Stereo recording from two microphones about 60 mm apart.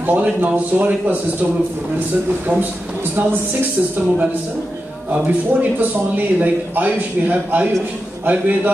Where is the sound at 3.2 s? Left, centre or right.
Right.